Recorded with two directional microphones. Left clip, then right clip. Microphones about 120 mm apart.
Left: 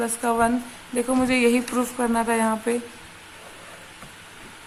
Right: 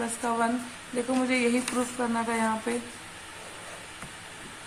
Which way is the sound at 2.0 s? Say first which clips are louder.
Left 7 dB; 90° left.